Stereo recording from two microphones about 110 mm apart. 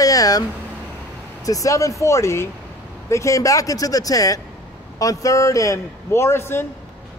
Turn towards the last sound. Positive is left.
turn(degrees=20)  # may be behind; listen again after turning